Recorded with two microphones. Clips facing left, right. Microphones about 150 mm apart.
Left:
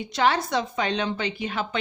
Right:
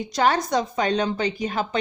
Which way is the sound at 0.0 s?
40° right (ahead or behind).